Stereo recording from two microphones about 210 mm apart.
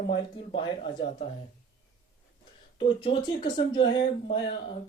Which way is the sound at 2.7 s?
25° left (ahead or behind).